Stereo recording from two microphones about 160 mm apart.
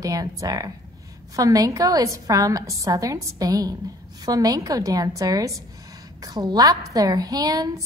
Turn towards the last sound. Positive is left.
turn(degrees=-25)  # may be behind; listen again after turning